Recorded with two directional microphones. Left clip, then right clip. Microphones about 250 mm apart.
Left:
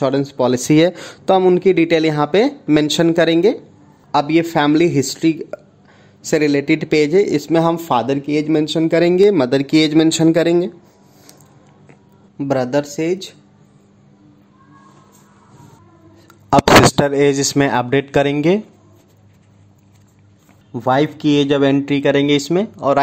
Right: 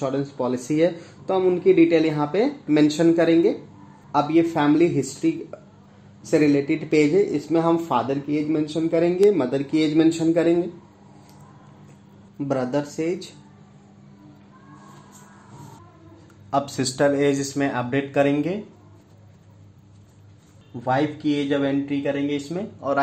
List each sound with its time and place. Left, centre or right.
0.0 s speech: left
12.4 s speech: left
16.4 s speech: left
20.8 s speech: left